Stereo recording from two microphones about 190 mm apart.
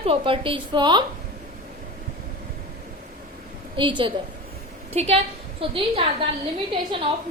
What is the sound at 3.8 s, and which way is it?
A woman's voice, 25° right (ahead or behind).